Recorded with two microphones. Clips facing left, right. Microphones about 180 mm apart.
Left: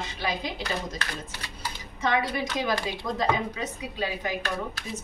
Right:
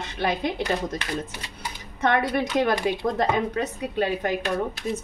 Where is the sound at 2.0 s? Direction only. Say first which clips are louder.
Right 4 dB; 60° right (ahead or behind).